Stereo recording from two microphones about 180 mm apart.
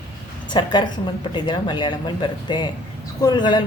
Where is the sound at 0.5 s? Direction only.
25° left (ahead or behind).